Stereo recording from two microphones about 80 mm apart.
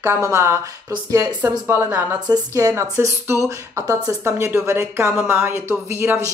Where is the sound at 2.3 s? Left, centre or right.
Right.